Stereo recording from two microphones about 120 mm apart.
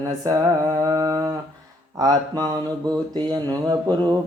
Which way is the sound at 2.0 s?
35° right (ahead or behind).